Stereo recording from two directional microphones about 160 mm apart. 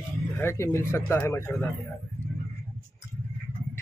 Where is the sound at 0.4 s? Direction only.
15° left (ahead or behind).